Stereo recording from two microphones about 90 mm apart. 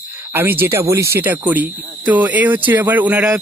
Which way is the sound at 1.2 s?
20° right (ahead or behind).